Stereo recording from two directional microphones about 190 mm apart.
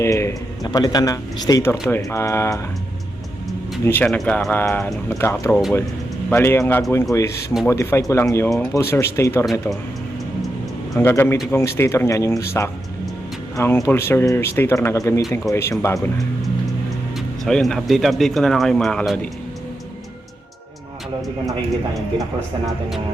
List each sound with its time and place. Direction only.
0.0 s a man's voice: 15° left (ahead or behind)
3.8 s speech: 10° left (ahead or behind)
10.9 s speech: 10° left (ahead or behind)
13.6 s speech: 15° left (ahead or behind)
17.2 s speech: centre (ahead or behind)